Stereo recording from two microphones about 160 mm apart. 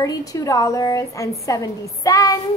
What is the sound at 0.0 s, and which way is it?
A woman's voice, 20° left (ahead or behind).